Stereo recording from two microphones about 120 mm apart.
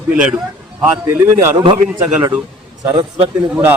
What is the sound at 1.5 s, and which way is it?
Speech, 40° right (ahead or behind).